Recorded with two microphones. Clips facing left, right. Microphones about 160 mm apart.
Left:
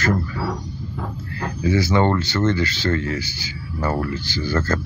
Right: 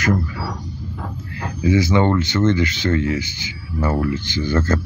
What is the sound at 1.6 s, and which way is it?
Speech, 20° right (ahead or behind).